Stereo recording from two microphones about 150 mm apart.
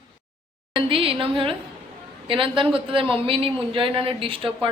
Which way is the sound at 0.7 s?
40° right (ahead or behind).